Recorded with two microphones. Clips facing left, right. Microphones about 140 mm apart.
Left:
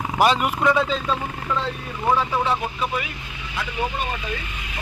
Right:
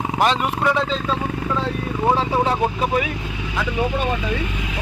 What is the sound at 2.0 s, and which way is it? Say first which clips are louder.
Speech: right 2 dB; 30° right (ahead or behind).